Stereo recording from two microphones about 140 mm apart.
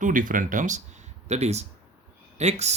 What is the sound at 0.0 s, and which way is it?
Speech, 70° right (ahead or behind).